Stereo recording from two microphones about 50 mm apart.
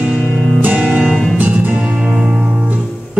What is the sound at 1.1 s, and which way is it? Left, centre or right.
Music, centre.